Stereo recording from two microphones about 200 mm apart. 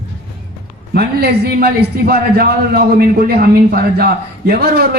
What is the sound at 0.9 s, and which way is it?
A man's voice, 50° right (ahead or behind).